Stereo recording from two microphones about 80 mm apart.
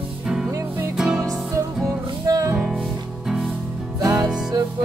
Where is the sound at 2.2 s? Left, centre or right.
Right.